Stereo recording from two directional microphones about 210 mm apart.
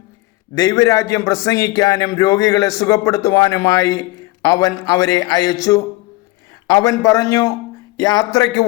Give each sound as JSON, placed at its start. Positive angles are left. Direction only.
{"t": 0.5, "sound": "a man's voice", "side_deg": 15}